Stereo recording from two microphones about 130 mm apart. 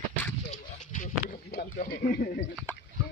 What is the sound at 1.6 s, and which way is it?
Speech, 90° left.